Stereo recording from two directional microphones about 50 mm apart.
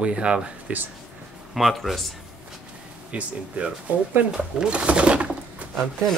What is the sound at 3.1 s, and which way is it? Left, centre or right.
Speech, right.